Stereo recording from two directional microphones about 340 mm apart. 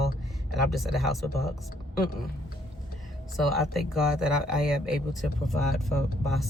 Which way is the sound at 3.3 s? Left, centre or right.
Centre.